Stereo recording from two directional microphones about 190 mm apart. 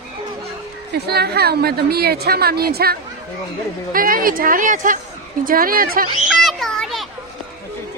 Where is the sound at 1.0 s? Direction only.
60° right (ahead or behind).